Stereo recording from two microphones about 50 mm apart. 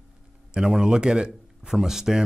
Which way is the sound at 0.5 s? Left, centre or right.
Centre.